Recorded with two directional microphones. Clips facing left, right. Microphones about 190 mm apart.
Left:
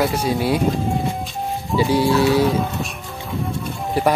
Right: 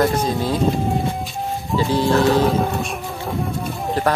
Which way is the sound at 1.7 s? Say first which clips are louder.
Left 1 dB; 10° left (ahead or behind).